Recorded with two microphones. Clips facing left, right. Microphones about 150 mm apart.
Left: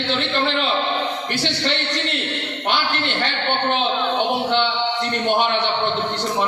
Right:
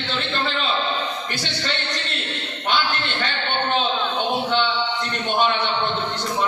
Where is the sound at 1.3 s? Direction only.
65° left (ahead or behind).